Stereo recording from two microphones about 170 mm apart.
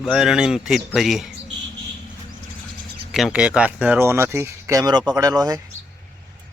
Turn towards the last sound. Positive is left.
turn(degrees=-20)  # may be behind; listen again after turning